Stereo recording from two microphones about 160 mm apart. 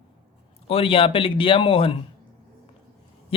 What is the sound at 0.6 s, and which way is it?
Speech, 35° left (ahead or behind).